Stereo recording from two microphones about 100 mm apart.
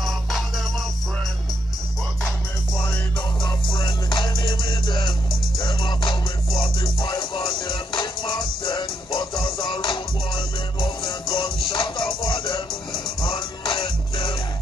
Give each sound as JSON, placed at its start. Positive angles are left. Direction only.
{"t": 0.0, "sound": "music", "side_deg": 0}
{"t": 3.4, "sound": "music", "side_deg": 55}